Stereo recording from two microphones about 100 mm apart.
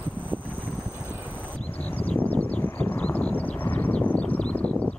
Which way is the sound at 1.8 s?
20° left (ahead or behind).